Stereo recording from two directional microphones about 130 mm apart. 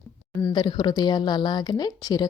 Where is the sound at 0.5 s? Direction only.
35° left (ahead or behind).